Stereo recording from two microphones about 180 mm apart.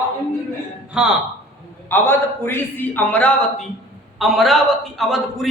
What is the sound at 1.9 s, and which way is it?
A man's voice, 10° left (ahead or behind).